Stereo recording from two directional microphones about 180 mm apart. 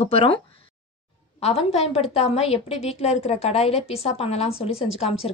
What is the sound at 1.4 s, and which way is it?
A woman's voice, 35° left (ahead or behind).